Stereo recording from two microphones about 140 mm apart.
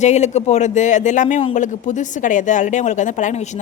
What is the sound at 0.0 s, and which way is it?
A woman's voice, 55° left (ahead or behind).